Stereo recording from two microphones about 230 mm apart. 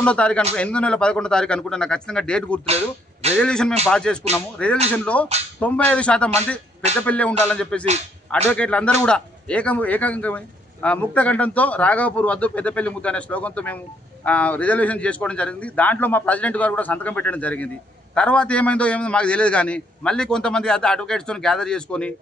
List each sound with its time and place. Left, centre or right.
0.0 s a man's voice: centre
2.6 s speech: right
3.3 s a man's voice: centre